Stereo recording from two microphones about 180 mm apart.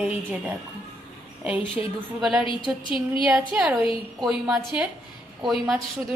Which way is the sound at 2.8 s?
25° left (ahead or behind).